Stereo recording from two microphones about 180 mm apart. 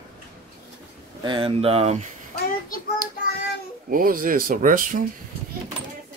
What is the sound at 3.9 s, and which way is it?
Speech, 50° right (ahead or behind).